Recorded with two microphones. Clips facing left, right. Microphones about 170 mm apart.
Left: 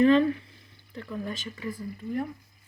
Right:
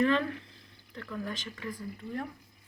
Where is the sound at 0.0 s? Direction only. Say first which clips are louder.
Left 7 dB; 20° left (ahead or behind).